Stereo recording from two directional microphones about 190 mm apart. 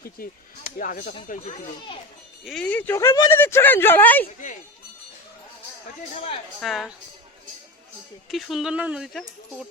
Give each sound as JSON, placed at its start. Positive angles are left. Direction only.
{"t": 0.2, "sound": "speech", "side_deg": 50}
{"t": 2.4, "sound": "speech", "side_deg": 0}
{"t": 6.6, "sound": "speech", "side_deg": 0}
{"t": 8.3, "sound": "speech", "side_deg": 0}